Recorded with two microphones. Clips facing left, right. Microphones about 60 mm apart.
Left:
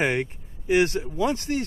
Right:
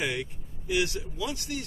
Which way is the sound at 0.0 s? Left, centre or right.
Left.